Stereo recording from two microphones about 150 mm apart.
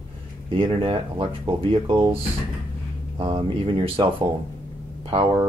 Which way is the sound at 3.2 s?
35° right (ahead or behind).